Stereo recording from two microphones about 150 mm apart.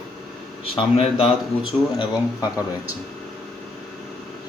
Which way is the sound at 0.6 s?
40° left (ahead or behind).